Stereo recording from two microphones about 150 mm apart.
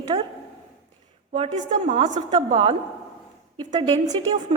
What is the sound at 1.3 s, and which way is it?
Speech, 50° right (ahead or behind).